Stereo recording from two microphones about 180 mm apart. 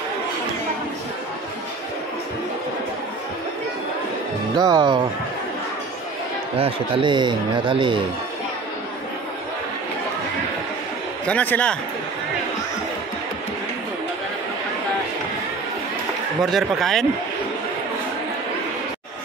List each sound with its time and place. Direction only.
4.6 s speech: 20° right (ahead or behind)
6.6 s speech: 30° right (ahead or behind)
11.2 s a man's voice: 10° left (ahead or behind)
16.4 s speech: centre (ahead or behind)